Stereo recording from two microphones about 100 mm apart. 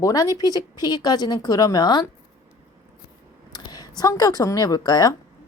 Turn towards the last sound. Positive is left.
turn(degrees=40)  # may be behind; listen again after turning